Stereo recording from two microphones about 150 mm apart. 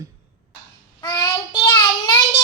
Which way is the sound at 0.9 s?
25° left (ahead or behind).